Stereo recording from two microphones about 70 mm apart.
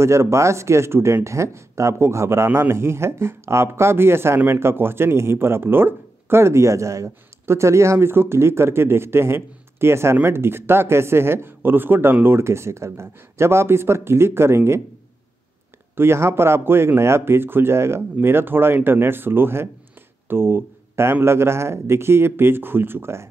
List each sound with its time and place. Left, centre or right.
0.0 s speech: right
16.0 s speech: right